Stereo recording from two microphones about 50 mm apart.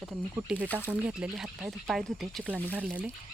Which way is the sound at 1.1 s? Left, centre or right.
Centre.